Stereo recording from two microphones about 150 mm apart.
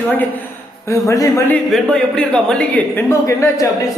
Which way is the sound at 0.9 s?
20° left (ahead or behind).